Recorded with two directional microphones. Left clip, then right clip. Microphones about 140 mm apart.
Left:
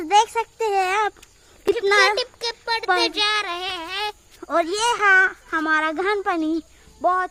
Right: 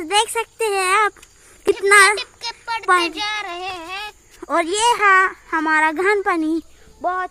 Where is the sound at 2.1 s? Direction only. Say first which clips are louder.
Left 2 dB; 60° left (ahead or behind).